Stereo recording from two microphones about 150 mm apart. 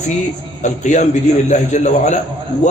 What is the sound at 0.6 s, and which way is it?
A man's voice, 55° left (ahead or behind).